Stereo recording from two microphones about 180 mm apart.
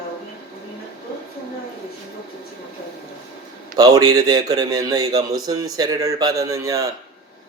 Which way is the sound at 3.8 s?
20° right (ahead or behind).